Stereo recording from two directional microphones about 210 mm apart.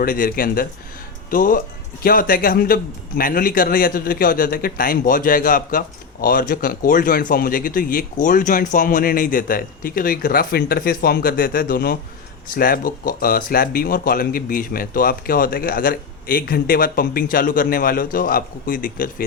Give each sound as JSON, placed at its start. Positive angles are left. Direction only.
{"t": 0.0, "sound": "a man's voice", "side_deg": 45}